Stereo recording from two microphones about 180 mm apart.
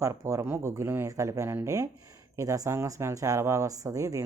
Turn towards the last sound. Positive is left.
turn(degrees=-15)  # may be behind; listen again after turning